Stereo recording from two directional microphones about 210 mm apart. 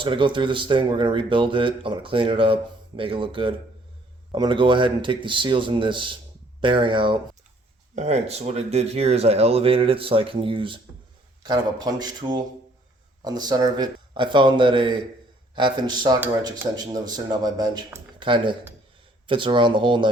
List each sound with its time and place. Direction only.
0.0 s speech: 25° right (ahead or behind)